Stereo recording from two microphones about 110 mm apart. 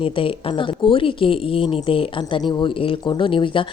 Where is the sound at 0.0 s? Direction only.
55° left (ahead or behind).